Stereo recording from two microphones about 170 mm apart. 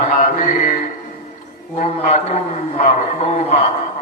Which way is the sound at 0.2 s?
50° left (ahead or behind).